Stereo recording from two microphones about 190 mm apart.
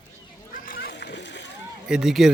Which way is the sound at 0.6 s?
50° left (ahead or behind).